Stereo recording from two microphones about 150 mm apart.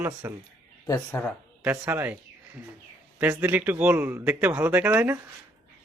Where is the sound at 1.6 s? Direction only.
15° right (ahead or behind).